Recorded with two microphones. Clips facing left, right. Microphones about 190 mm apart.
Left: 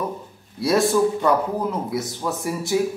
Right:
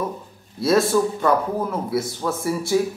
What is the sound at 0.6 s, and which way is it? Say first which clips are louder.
Speech: right 2 dB; 15° left (ahead or behind).